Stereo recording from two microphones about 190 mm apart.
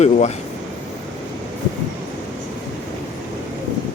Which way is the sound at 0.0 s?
35° left (ahead or behind).